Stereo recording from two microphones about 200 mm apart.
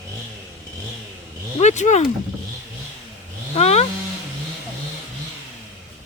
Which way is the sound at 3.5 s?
30° left (ahead or behind).